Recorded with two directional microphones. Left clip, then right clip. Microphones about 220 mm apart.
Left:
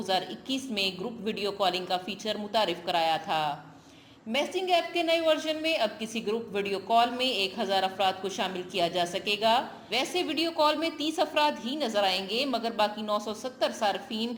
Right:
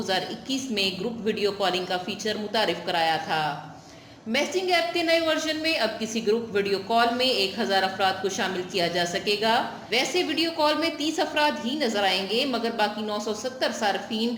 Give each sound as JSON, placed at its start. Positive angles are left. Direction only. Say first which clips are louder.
{"t": 0.1, "sound": "a woman's voice", "louder": "right 1 dB", "side_deg": 20}